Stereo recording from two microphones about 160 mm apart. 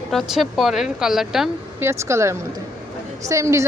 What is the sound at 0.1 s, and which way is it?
Speech, centre (ahead or behind).